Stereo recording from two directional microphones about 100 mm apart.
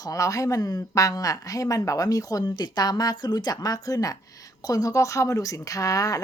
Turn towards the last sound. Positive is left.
turn(degrees=35)  # may be behind; listen again after turning